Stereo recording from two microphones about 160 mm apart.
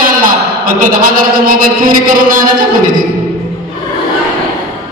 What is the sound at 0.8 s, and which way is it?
Speech, 60° right (ahead or behind).